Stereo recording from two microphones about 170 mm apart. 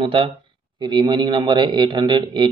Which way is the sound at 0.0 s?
30° right (ahead or behind).